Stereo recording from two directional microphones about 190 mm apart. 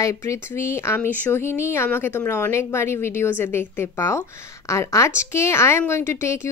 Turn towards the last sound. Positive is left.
turn(degrees=15)  # may be behind; listen again after turning